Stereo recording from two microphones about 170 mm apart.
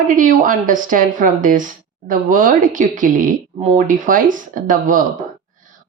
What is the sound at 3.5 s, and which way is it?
Speech, 40° right (ahead or behind).